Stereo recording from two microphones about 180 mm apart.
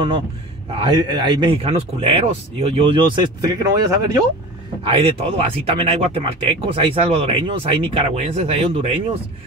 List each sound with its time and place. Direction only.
0.7 s speech: 25° right (ahead or behind)
4.8 s speech: 30° right (ahead or behind)